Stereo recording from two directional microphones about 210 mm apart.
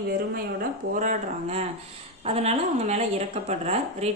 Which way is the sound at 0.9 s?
35° right (ahead or behind).